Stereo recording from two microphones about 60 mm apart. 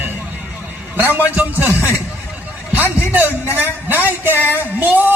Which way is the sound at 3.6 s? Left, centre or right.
Right.